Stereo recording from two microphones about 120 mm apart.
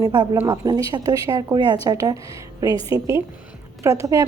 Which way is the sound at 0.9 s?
35° right (ahead or behind).